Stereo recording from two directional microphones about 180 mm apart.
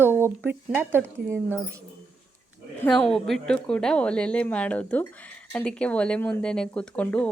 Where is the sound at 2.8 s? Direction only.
5° left (ahead or behind).